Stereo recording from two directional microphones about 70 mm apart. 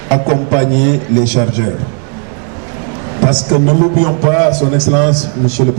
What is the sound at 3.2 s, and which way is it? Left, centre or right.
A man's voice, centre.